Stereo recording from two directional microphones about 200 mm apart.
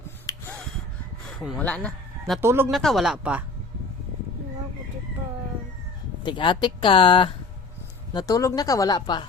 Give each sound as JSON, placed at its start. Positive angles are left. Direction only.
{"t": 0.3, "sound": "gasp", "side_deg": 15}
{"t": 1.4, "sound": "speech", "side_deg": 5}
{"t": 2.4, "sound": "speech", "side_deg": -15}
{"t": 2.6, "sound": "speech", "side_deg": 0}
{"t": 6.2, "sound": "speech", "side_deg": 25}